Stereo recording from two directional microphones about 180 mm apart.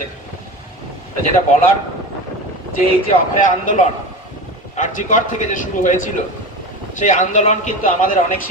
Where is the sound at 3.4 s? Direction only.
45° left (ahead or behind).